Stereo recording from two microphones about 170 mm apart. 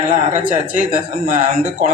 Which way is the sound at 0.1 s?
50° right (ahead or behind).